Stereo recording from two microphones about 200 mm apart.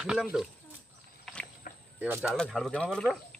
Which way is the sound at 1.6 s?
45° left (ahead or behind).